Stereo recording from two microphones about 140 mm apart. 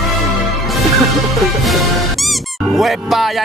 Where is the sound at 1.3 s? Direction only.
Centre (ahead or behind).